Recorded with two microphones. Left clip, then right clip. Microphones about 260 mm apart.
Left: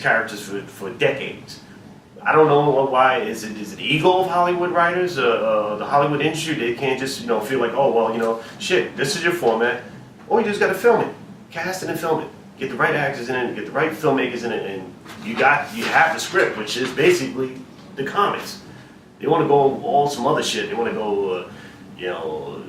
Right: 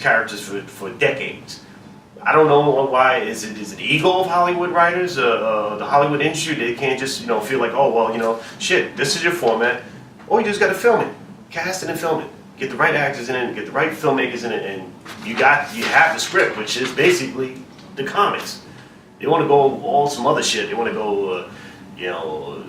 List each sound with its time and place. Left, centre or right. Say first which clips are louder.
0.0 s speech: right 2 dB; centre
2.2 s a man's voice: right 1 dB; centre
19.5 s speech: right 2 dB; left
20.2 s speech: right 2 dB; centre